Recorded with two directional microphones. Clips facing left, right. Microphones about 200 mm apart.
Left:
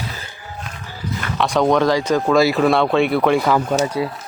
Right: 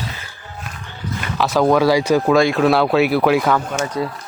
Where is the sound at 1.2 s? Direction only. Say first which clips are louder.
Right 1 dB; 5° right (ahead or behind).